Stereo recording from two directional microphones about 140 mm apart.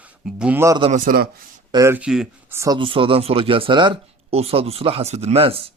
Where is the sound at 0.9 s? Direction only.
85° right.